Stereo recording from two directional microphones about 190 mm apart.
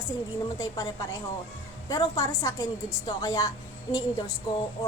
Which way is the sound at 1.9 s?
15° left (ahead or behind).